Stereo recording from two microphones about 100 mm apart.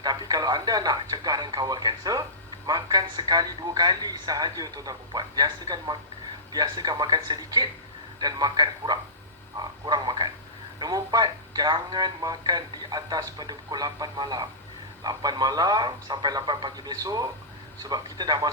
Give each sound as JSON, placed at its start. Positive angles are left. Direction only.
{"t": 0.0, "sound": "speech", "side_deg": -40}